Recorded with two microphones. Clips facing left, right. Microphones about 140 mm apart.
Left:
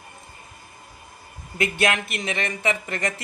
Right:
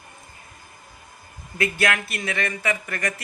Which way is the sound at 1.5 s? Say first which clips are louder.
Left 1 dB; 20° left (ahead or behind).